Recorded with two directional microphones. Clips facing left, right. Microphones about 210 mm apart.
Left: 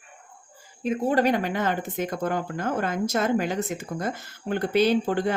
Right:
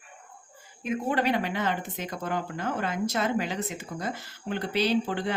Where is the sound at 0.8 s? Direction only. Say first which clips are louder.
Left 5 dB; 35° left (ahead or behind).